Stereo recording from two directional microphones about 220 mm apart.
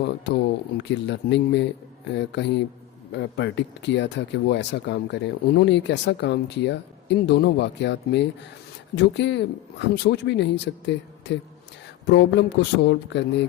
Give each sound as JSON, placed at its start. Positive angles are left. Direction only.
{"t": 0.0, "sound": "speech", "side_deg": 50}